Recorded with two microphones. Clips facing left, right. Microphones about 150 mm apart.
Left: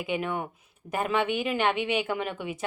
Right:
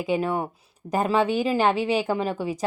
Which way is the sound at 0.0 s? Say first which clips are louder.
Right 5 dB; 35° right (ahead or behind).